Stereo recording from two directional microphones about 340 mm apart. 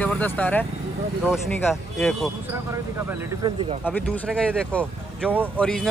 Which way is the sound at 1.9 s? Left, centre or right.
Centre.